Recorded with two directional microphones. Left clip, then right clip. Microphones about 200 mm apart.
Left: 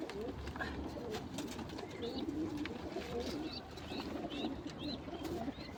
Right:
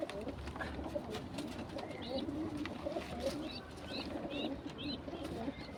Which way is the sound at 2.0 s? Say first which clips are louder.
Even; 30° right (ahead or behind).